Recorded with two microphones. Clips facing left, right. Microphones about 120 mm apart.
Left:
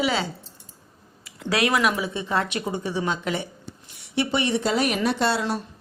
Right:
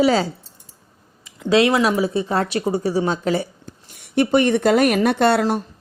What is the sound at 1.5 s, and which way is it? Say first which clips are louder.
Speech: right 6 dB; 25° right (ahead or behind).